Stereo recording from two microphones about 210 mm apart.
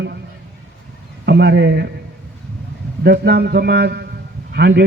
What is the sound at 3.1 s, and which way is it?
A man's voice, 50° right (ahead or behind).